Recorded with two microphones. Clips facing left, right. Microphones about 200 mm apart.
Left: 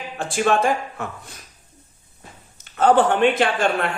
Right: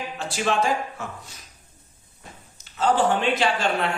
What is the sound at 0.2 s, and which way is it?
Speech, 50° left (ahead or behind).